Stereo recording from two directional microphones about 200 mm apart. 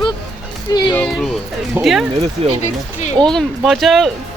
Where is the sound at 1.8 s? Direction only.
Centre (ahead or behind).